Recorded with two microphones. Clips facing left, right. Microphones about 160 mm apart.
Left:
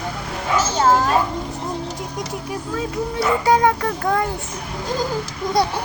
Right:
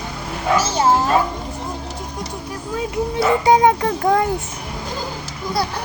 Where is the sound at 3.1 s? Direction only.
20° right (ahead or behind).